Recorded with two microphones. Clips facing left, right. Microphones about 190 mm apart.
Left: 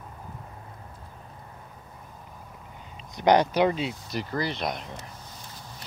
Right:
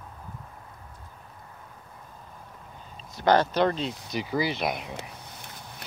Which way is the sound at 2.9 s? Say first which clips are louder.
Left 1 dB; 15° left (ahead or behind).